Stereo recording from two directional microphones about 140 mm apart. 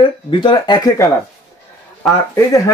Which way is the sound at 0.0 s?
35° left (ahead or behind).